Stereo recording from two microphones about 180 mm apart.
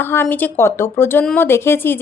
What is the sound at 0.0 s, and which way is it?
A woman's voice, 10° left (ahead or behind).